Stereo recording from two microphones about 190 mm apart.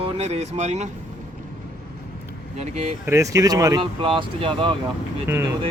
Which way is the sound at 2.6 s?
35° right (ahead or behind).